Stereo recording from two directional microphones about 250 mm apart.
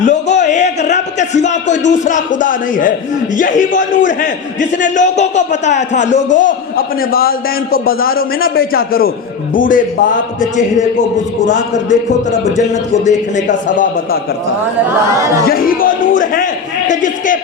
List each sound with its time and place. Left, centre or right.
0.0 s a sound: left
1.8 s a man's voice: left
11.4 s a man's voice: left
13.1 s a man's voice: left
15.2 s speech: centre
15.4 s a man's voice: left